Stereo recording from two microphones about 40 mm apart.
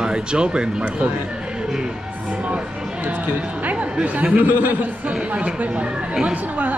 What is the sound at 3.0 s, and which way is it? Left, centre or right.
Speech, right.